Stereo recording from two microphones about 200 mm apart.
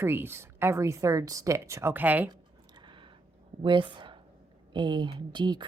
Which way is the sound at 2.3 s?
20° right (ahead or behind).